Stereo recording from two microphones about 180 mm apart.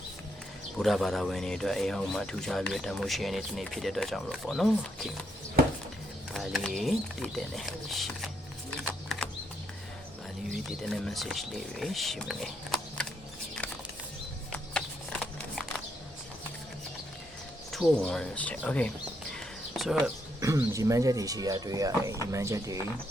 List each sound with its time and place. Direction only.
0.8 s a man's voice: centre (ahead or behind)
6.3 s a man's voice: centre (ahead or behind)
8.8 s a sound: 5° left (ahead or behind)
10.5 s a man's voice: centre (ahead or behind)
14.5 s a sound: 5° left (ahead or behind)
17.7 s speech: centre (ahead or behind)
20.4 s speech: 15° right (ahead or behind)